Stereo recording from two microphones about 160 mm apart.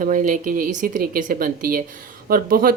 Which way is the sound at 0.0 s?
55° right (ahead or behind).